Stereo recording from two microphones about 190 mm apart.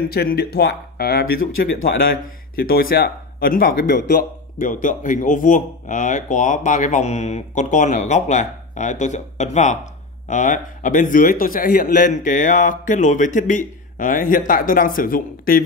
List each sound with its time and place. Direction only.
0.1 s a man's voice: 55° left (ahead or behind)